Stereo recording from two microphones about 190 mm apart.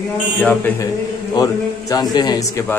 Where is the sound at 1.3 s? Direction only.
20° left (ahead or behind).